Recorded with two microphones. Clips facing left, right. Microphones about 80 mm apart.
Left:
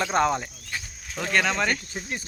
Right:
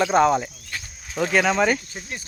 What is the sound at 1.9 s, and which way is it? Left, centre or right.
Speech, left.